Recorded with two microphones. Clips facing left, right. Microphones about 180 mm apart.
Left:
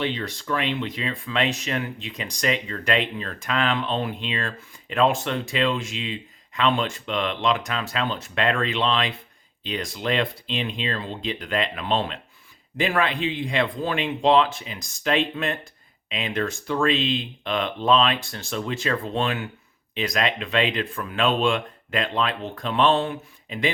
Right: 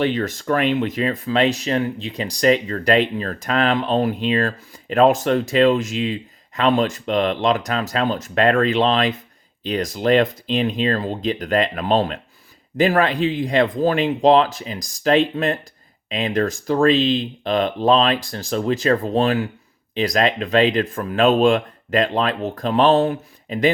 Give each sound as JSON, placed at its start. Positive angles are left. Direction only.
{"t": 0.0, "sound": "speech", "side_deg": -45}